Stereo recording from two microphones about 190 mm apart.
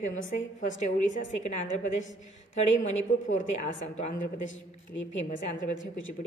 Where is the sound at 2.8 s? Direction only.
40° left (ahead or behind).